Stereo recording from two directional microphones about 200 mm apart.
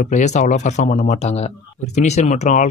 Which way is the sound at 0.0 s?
35° left (ahead or behind).